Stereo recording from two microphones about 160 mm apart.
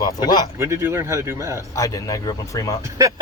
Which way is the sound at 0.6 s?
15° right (ahead or behind).